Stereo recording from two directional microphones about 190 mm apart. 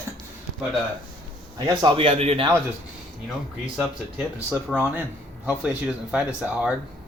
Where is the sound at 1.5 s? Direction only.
25° right (ahead or behind).